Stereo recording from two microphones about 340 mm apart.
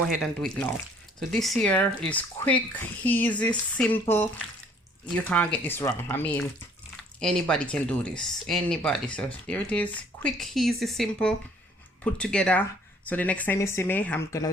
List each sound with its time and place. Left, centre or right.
0.2 s speech: centre